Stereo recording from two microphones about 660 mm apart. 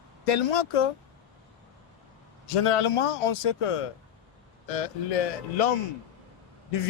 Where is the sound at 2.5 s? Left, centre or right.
Left.